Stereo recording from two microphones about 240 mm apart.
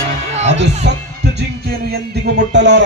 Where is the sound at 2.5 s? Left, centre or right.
Right.